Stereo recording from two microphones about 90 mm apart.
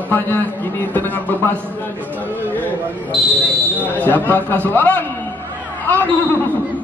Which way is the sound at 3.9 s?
20° left (ahead or behind).